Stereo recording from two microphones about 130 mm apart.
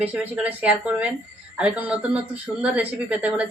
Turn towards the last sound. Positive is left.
turn(degrees=-10)  # may be behind; listen again after turning